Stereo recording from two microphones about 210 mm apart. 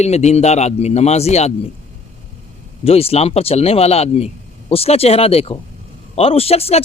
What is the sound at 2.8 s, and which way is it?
A man's voice, 30° left (ahead or behind).